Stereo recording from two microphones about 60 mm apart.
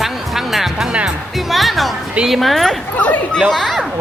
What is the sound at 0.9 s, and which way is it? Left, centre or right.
Speech, centre.